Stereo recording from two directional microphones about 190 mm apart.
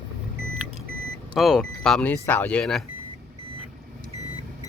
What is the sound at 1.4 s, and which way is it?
Speech, centre (ahead or behind).